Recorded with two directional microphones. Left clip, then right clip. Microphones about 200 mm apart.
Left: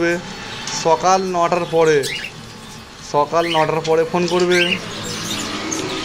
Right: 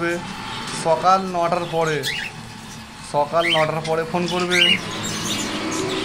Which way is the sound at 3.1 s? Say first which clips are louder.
Left 2 dB; 15° left (ahead or behind).